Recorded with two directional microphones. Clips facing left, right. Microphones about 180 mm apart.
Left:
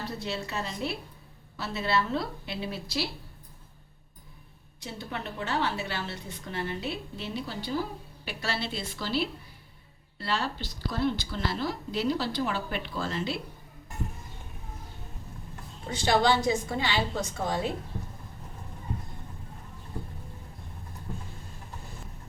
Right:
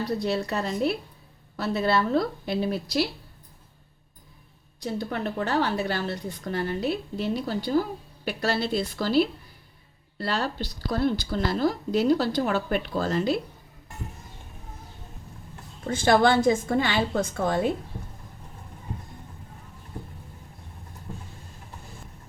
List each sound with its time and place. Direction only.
0.0 s a woman's voice: 40° right (ahead or behind)
4.8 s a woman's voice: 40° right (ahead or behind)
15.9 s a woman's voice: 50° right (ahead or behind)